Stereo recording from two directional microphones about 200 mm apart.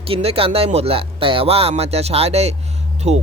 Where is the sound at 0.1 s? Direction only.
30° right (ahead or behind).